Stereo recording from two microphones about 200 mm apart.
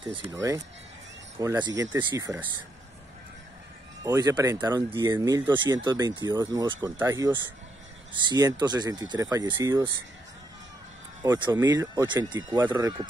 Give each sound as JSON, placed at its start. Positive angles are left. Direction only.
{"t": 0.1, "sound": "speech", "side_deg": -20}
{"t": 4.0, "sound": "speech", "side_deg": -15}
{"t": 11.3, "sound": "speech", "side_deg": -20}
{"t": 12.5, "sound": "speech", "side_deg": -10}